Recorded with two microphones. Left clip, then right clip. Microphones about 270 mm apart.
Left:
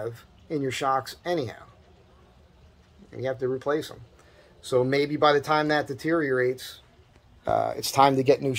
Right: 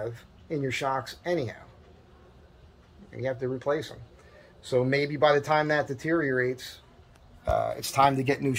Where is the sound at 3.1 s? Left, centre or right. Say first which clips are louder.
Left 3 dB; centre.